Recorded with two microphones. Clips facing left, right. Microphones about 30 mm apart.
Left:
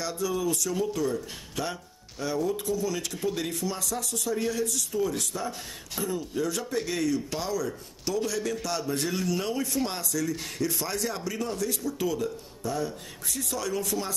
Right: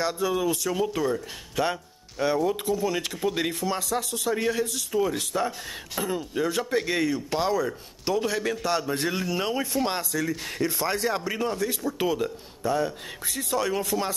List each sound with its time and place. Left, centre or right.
0.0 s a man's voice: right